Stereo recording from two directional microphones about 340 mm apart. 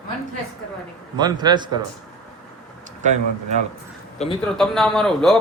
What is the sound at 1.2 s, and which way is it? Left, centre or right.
Speech, centre.